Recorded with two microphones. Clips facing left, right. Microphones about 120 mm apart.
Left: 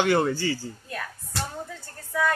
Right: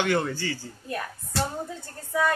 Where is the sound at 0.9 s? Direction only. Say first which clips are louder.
Right 7 dB; 30° right (ahead or behind).